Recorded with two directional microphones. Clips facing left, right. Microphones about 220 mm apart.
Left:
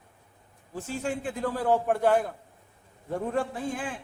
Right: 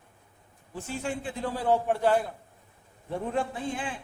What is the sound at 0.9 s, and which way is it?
A man's voice, 45° left (ahead or behind).